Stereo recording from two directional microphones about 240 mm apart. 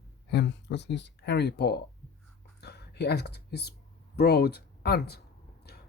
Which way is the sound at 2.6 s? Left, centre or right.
Left.